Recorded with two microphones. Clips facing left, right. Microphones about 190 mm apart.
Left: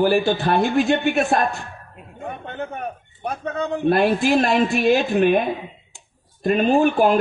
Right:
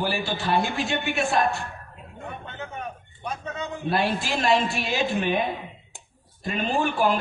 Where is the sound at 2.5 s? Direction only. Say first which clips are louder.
Left 8 dB; 55° left (ahead or behind).